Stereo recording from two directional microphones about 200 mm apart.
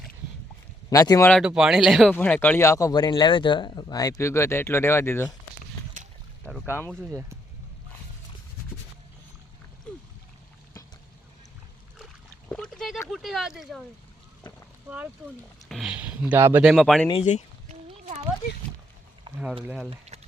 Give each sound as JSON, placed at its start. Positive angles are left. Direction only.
{"t": 0.9, "sound": "speech", "side_deg": 15}
{"t": 1.3, "sound": "speech", "side_deg": -5}
{"t": 6.5, "sound": "speech", "side_deg": 5}
{"t": 7.1, "sound": "speech", "side_deg": -15}
{"t": 12.5, "sound": "a sound", "side_deg": 5}
{"t": 13.1, "sound": "speech", "side_deg": 0}
{"t": 14.8, "sound": "speech", "side_deg": -10}
{"t": 16.7, "sound": "speech", "side_deg": 0}
{"t": 17.1, "sound": "speech", "side_deg": 30}
{"t": 17.7, "sound": "a sound", "side_deg": -35}
{"t": 19.6, "sound": "speech", "side_deg": 0}